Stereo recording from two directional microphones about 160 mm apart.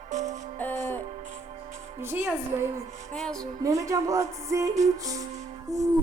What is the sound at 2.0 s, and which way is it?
Speech, 15° right (ahead or behind).